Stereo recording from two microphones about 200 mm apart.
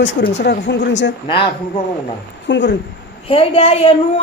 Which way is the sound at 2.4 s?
60° left (ahead or behind).